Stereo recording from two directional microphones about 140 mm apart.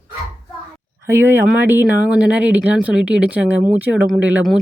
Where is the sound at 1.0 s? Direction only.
15° right (ahead or behind).